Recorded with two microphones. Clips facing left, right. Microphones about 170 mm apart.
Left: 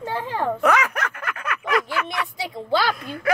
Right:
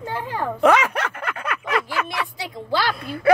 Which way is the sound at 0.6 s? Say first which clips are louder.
Right 6 dB; 30° right (ahead or behind).